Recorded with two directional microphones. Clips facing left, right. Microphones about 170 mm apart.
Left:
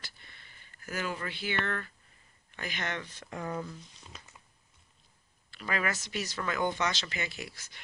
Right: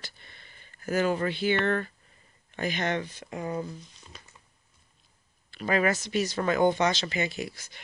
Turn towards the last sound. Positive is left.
turn(degrees=-20)  # may be behind; listen again after turning